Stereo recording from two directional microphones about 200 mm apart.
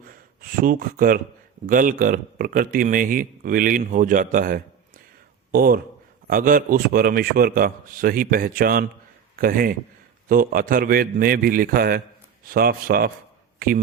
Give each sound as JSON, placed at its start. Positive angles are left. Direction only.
{"t": 0.1, "sound": "a man's voice", "side_deg": -45}